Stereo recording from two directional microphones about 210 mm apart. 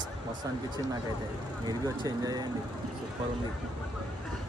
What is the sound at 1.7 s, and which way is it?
Speech, 15° right (ahead or behind).